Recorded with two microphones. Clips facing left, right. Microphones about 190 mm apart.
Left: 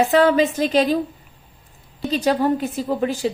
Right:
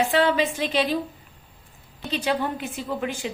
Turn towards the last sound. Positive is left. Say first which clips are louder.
# left 7 dB
turn(degrees=35)  # may be behind; listen again after turning